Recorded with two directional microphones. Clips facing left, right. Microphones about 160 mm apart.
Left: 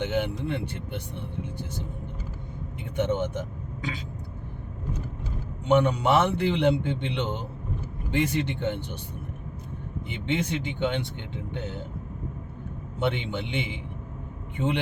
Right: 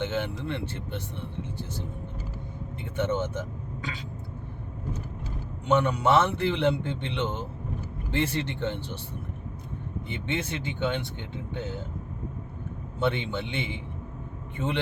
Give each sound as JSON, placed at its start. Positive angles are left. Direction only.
{"t": 0.0, "sound": "a man's voice", "side_deg": 15}
{"t": 2.9, "sound": "a man's voice", "side_deg": 15}
{"t": 5.6, "sound": "a man's voice", "side_deg": 15}
{"t": 10.1, "sound": "a man's voice", "side_deg": 15}
{"t": 13.0, "sound": "a man's voice", "side_deg": 15}